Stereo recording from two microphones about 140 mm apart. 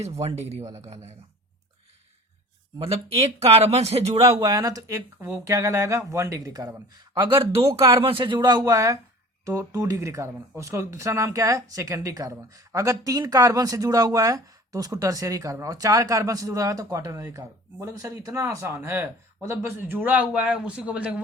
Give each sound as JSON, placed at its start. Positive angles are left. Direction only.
{"t": 0.2, "sound": "speech", "side_deg": -50}
{"t": 2.7, "sound": "speech", "side_deg": -45}
{"t": 4.4, "sound": "a man's voice", "side_deg": -25}